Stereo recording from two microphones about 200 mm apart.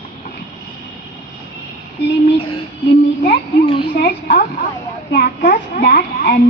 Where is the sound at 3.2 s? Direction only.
50° left (ahead or behind).